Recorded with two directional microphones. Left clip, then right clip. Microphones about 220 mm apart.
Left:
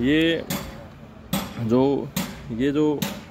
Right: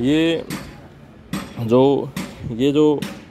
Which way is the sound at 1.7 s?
15° right (ahead or behind).